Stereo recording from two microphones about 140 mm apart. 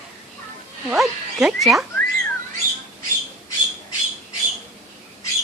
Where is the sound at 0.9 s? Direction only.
5° right (ahead or behind).